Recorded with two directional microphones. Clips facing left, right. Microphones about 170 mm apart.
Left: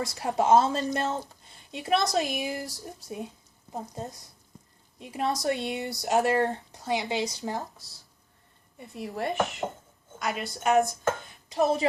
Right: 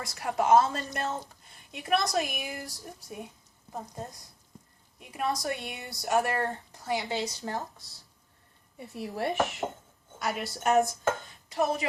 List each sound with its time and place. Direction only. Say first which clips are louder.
0.0 s speech: left 3 dB; 25° left (ahead or behind)
8.8 s speech: even; 5° right (ahead or behind)
11.4 s a woman's voice: left 4 dB; 25° left (ahead or behind)